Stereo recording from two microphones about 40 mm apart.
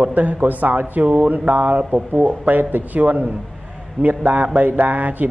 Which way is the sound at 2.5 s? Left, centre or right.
Right.